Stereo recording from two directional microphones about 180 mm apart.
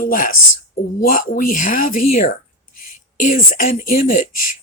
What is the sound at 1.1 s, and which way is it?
Speech, 50° left (ahead or behind).